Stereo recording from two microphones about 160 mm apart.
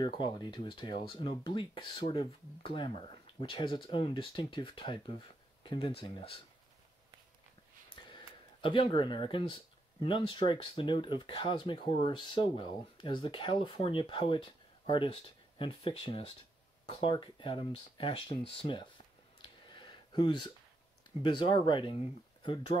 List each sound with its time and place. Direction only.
0.0 s speech: 30° left (ahead or behind)
7.9 s speech: 30° left (ahead or behind)
19.4 s a sound: 30° left (ahead or behind)
21.2 s speech: 30° left (ahead or behind)